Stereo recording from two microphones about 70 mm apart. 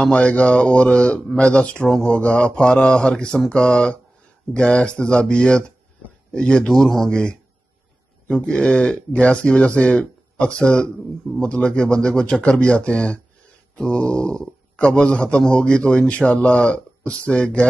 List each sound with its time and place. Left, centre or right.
0.0 s a man's voice: centre